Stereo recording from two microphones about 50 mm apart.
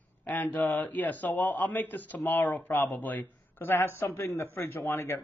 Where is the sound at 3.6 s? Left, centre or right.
Left.